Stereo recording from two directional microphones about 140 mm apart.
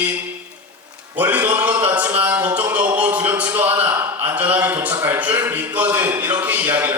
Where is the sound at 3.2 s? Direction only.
10° right (ahead or behind).